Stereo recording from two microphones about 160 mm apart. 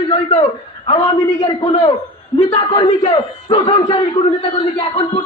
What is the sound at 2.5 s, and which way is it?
A man's voice, 30° left (ahead or behind).